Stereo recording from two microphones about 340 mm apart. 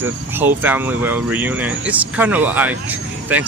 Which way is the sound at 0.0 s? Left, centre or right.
Centre.